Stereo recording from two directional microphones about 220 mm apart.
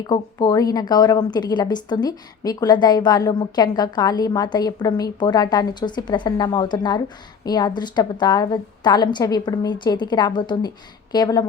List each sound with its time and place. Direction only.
0.1 s a woman's voice: 15° left (ahead or behind)